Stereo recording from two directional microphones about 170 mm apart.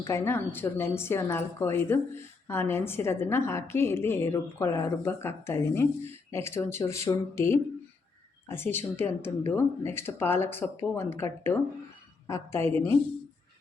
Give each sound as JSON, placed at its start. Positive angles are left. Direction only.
{"t": 0.0, "sound": "a woman's voice", "side_deg": 15}